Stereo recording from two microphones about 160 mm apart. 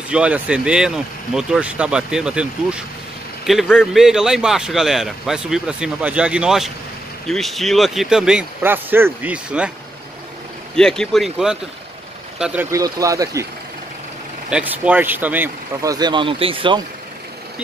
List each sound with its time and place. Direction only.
0.1 s speech: 5° right (ahead or behind)
10.8 s speech: 5° left (ahead or behind)
12.7 s speech: 20° right (ahead or behind)
14.5 s speech: 10° right (ahead or behind); by 16.8 s 30° right (ahead or behind)